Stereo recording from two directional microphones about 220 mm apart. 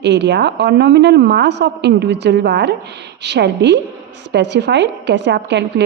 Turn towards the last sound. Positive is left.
turn(degrees=-50)  # may be behind; listen again after turning